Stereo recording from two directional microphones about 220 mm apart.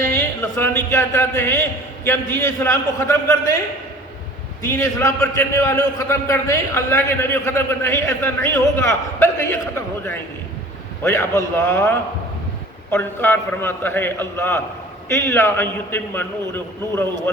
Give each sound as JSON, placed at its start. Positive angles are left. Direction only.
{"t": 0.6, "sound": "a man's voice", "side_deg": 10}
{"t": 4.7, "sound": "a man's voice", "side_deg": 15}